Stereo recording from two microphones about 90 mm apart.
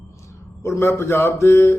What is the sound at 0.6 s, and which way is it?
Speech, 30° left (ahead or behind).